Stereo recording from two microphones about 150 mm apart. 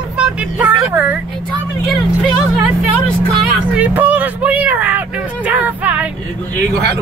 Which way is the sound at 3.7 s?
10° right (ahead or behind).